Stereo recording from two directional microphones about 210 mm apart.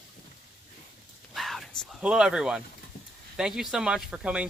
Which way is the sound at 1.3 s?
Centre (ahead or behind).